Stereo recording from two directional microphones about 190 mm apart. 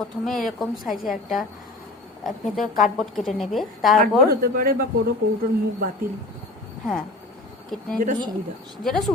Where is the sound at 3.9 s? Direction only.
50° right (ahead or behind).